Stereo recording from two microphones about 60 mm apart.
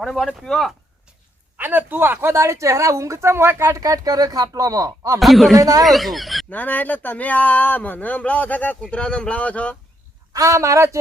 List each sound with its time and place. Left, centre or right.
0.0 s speech: centre
1.5 s speech: right
3.7 s speech: right
5.2 s speech: centre
5.5 s speech: right
5.8 s speech: centre
6.5 s speech: left
10.3 s speech: right